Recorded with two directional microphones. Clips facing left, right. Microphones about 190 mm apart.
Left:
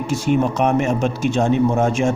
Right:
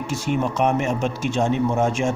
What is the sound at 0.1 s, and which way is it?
Speech, 35° left (ahead or behind).